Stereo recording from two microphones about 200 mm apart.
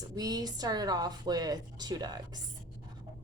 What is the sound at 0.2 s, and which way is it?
A woman's voice, 20° right (ahead or behind).